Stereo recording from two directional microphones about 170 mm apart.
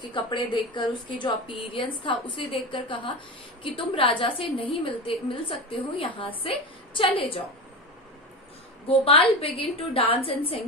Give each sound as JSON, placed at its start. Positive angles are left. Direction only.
{"t": 0.0, "sound": "a woman's voice", "side_deg": 30}
{"t": 8.8, "sound": "a woman's voice", "side_deg": 35}